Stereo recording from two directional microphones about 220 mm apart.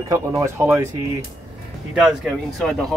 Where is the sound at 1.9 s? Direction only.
Centre (ahead or behind).